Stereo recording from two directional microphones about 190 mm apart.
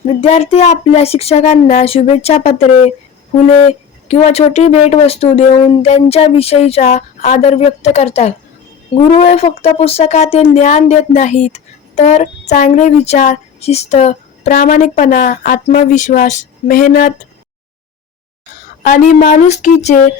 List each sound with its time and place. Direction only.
0.1 s speech: 30° left (ahead or behind)
18.8 s speech: 45° left (ahead or behind)